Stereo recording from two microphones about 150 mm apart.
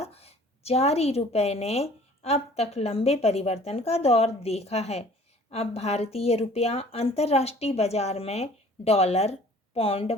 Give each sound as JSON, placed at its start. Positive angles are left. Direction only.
{"t": 0.0, "sound": "a woman's voice", "side_deg": 45}